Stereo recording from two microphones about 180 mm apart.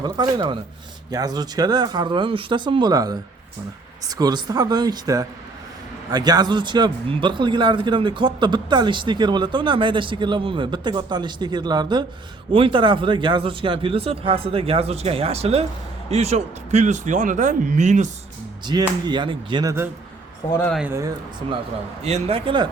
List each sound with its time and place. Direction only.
0.0 s a man's voice: 25° right (ahead or behind); by 18.1 s 40° right (ahead or behind)
18.6 s a man's voice: 25° right (ahead or behind)
20.5 s speech: 15° left (ahead or behind)
20.7 s speech: 10° right (ahead or behind)
22.0 s speech: 35° right (ahead or behind)